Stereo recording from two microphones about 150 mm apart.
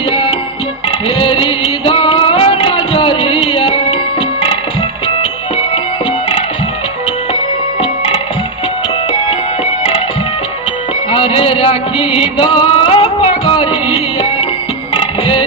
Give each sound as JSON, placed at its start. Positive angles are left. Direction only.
{"t": 0.1, "sound": "music", "side_deg": 35}
{"t": 7.8, "sound": "music", "side_deg": 40}
{"t": 11.1, "sound": "music", "side_deg": 40}